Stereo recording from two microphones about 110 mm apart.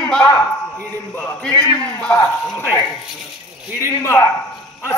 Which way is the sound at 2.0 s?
20° left (ahead or behind).